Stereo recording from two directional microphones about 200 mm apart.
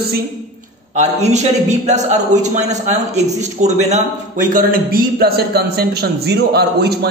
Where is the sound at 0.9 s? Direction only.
35° right (ahead or behind).